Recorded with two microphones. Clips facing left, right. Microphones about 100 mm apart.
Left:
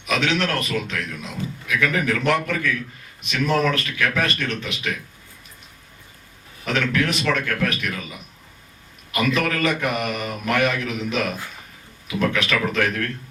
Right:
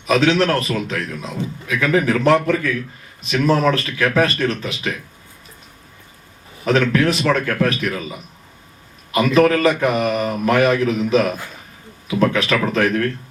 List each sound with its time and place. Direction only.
0.0 s a man's voice: 35° right (ahead or behind)
6.7 s a man's voice: 35° right (ahead or behind)
9.1 s a man's voice: 35° right (ahead or behind)